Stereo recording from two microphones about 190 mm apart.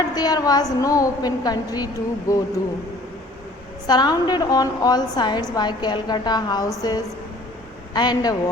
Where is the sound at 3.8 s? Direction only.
20° left (ahead or behind).